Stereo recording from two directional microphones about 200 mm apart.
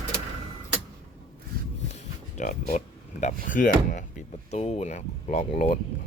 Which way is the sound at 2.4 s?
40° left (ahead or behind).